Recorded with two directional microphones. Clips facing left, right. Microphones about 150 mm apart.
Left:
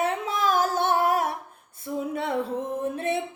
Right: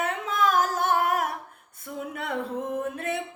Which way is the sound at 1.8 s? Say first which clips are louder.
Left 5 dB; 30° left (ahead or behind).